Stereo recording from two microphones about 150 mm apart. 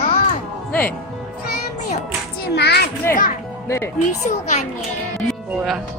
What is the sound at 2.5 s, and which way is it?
Speech, 90° left.